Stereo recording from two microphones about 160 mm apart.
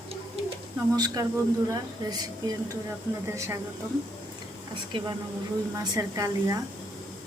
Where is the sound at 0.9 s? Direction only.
25° right (ahead or behind).